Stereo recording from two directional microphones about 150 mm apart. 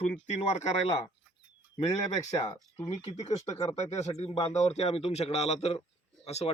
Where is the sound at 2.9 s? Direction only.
45° left (ahead or behind).